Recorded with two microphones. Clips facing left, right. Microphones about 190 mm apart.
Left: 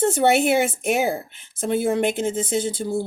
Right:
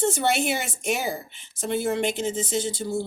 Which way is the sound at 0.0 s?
55° left (ahead or behind).